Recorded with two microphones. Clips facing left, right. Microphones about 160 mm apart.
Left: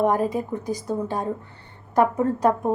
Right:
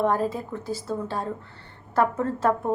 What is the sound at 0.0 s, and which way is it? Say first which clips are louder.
A woman's voice: left 3 dB; 15° left (ahead or behind).